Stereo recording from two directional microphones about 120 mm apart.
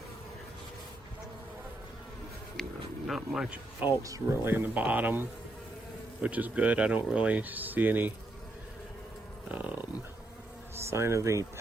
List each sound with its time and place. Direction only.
2.6 s a sound: 5° left (ahead or behind)
3.1 s speech: 5° right (ahead or behind)
4.0 s speech: 30° right (ahead or behind)
4.5 s speech: 15° right (ahead or behind)
9.5 s livestock: 15° right (ahead or behind)
10.8 s speech: 20° right (ahead or behind)